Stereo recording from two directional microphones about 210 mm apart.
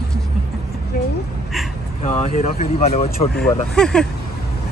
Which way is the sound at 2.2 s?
35° left (ahead or behind).